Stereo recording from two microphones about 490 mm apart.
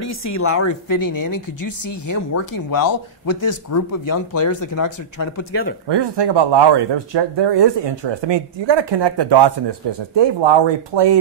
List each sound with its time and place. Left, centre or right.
0.2 s speech: left
5.9 s speech: right